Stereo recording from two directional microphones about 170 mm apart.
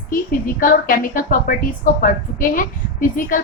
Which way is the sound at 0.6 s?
55° left (ahead or behind).